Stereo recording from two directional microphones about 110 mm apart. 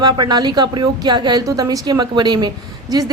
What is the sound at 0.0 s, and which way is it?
A woman's voice, 40° right (ahead or behind).